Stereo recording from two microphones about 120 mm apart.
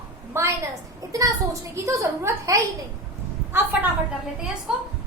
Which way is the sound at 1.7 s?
25° right (ahead or behind).